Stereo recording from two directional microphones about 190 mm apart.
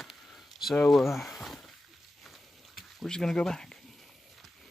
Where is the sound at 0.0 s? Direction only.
Centre (ahead or behind).